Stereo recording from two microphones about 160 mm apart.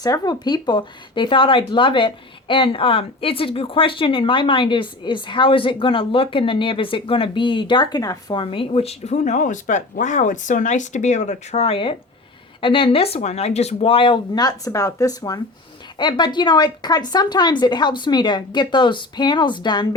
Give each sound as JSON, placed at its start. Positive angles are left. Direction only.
{"t": 0.0, "sound": "a woman's voice", "side_deg": 25}